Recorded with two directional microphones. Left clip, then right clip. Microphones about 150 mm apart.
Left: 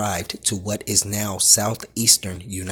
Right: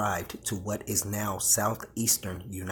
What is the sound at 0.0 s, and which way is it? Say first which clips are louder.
Speech: left 5 dB; 55° left (ahead or behind).